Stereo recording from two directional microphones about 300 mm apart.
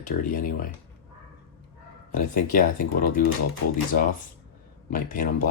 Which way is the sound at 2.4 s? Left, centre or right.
Left.